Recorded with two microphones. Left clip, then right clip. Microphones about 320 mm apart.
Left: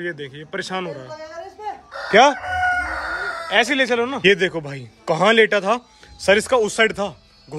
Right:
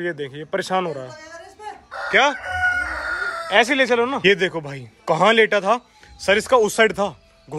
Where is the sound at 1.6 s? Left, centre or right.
Centre.